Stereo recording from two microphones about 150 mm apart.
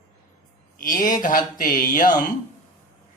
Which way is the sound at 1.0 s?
60° left (ahead or behind).